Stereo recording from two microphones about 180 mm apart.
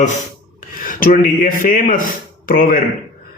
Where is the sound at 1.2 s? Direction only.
50° left (ahead or behind).